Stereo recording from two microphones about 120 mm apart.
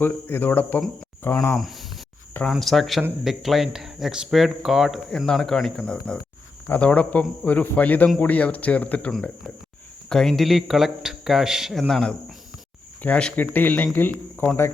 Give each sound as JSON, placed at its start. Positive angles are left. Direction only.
{"t": 0.0, "sound": "speech", "side_deg": 15}
{"t": 1.5, "sound": "speech", "side_deg": 0}